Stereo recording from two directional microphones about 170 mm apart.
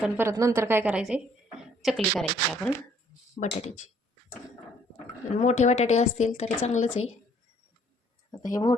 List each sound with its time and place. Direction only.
0.0 s a woman's voice: 15° right (ahead or behind); by 2.7 s centre (ahead or behind)
3.4 s a woman's voice: 40° left (ahead or behind)
5.4 s a woman's voice: 45° left (ahead or behind)
8.4 s speech: 20° left (ahead or behind)